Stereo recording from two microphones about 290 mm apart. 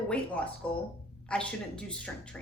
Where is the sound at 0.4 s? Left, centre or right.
Centre.